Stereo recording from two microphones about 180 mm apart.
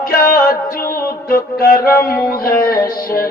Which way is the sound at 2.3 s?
55° left (ahead or behind).